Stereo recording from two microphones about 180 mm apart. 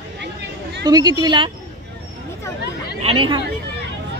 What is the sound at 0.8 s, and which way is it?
Speech, 20° right (ahead or behind).